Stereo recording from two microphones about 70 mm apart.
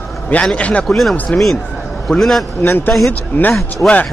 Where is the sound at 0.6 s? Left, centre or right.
Centre.